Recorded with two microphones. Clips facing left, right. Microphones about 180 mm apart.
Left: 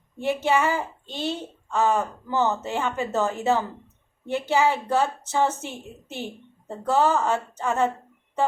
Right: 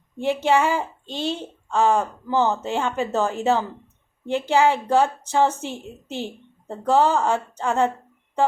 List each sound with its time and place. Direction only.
0.2 s a woman's voice: 15° right (ahead or behind)